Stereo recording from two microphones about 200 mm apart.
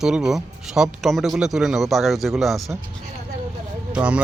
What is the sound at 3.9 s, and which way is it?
Speech, 5° right (ahead or behind).